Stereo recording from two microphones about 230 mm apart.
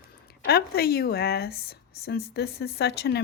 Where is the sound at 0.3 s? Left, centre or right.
Left.